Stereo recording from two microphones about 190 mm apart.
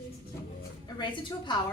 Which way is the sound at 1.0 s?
25° left (ahead or behind).